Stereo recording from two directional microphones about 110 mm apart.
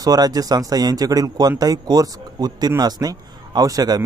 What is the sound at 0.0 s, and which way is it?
A man's voice, 35° right (ahead or behind).